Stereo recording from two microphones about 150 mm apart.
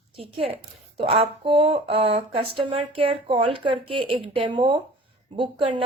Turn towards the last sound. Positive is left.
turn(degrees=-35)  # may be behind; listen again after turning